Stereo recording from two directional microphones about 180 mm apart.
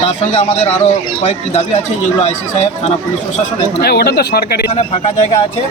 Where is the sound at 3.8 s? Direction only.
60° left (ahead or behind).